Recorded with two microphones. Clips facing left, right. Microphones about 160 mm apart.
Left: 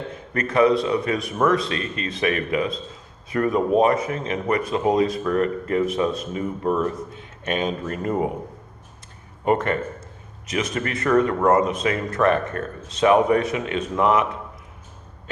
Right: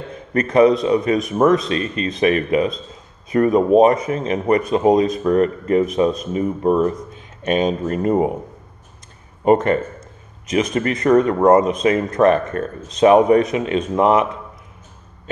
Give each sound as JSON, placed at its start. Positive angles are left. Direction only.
{"t": 0.3, "sound": "speech", "side_deg": -20}
{"t": 9.4, "sound": "speech", "side_deg": -25}